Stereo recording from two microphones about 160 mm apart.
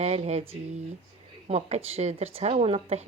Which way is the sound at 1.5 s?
40° right (ahead or behind).